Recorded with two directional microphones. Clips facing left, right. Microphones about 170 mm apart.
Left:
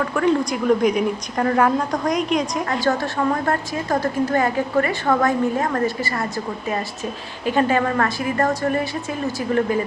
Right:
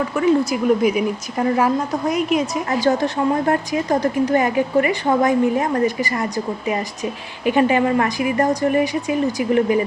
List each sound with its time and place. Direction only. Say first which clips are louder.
0.0 s a woman's voice: right 2 dB; 5° right (ahead or behind)
2.8 s a woman's voice: right 3 dB; 20° right (ahead or behind)